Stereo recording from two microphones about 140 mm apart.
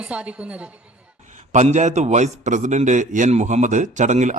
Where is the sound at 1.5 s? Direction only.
55° right (ahead or behind).